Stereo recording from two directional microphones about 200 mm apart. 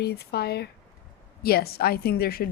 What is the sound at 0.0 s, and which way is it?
A woman's voice, 55° left (ahead or behind).